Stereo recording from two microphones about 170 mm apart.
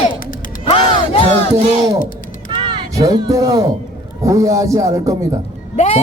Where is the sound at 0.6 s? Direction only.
35° left (ahead or behind).